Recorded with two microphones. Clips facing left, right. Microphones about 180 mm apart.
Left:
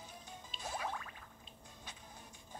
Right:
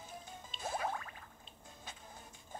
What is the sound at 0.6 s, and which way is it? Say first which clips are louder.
Music: right 4 dB; 50° right (ahead or behind).